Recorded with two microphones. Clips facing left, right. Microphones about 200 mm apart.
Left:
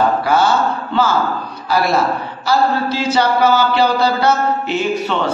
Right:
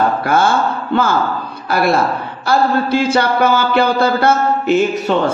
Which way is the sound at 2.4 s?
55° right (ahead or behind).